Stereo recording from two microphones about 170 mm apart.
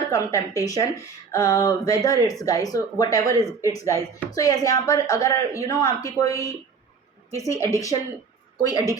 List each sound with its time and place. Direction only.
0.1 s a woman's voice: 20° left (ahead or behind)